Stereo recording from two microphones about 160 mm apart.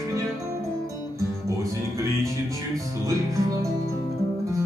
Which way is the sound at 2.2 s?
20° right (ahead or behind).